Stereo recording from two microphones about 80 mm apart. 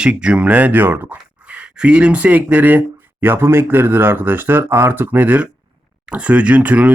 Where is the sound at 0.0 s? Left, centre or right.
Centre.